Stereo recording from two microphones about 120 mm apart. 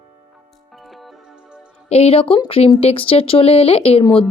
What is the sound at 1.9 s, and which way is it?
A woman's voice, 55° left (ahead or behind).